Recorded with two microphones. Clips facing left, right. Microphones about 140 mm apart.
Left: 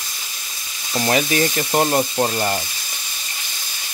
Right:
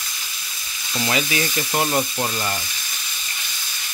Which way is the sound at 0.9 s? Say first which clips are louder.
Left 4 dB; 40° left (ahead or behind).